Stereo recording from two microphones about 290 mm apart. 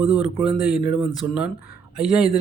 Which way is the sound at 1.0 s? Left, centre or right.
Centre.